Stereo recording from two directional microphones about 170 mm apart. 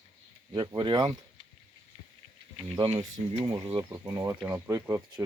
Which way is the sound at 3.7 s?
15° right (ahead or behind).